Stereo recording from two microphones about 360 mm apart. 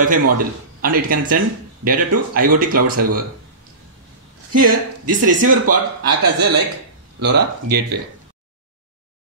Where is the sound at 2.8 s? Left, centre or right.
Right.